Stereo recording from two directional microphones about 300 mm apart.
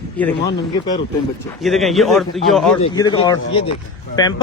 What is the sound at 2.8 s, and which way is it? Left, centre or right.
Speech, centre.